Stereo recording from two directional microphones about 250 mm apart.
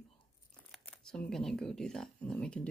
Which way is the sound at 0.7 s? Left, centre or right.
Centre.